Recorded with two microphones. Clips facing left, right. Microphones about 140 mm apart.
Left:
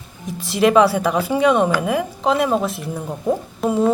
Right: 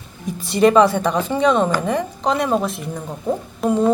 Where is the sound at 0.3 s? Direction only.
Centre (ahead or behind).